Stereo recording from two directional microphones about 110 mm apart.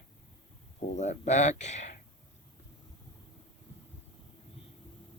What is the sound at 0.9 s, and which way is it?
Speech, 90° left.